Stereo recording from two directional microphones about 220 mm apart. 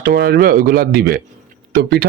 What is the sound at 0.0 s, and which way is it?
A man's voice, 45° right (ahead or behind).